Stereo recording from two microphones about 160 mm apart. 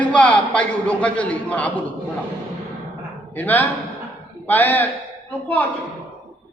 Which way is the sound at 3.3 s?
10° left (ahead or behind).